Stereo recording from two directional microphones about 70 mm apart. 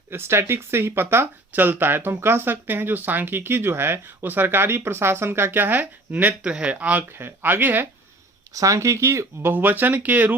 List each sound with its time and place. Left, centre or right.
0.1 s speech: right
6.5 s speech: centre
6.7 s speech: right
8.5 s speech: right